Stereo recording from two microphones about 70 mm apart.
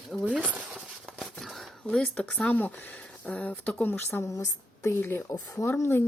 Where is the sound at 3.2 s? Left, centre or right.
Centre.